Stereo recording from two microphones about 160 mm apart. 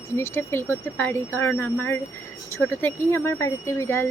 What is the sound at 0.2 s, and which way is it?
Speech, 15° left (ahead or behind).